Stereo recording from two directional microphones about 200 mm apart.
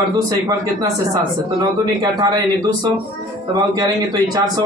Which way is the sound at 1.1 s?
20° right (ahead or behind).